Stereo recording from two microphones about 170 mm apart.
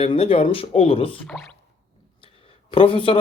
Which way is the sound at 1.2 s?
5° left (ahead or behind).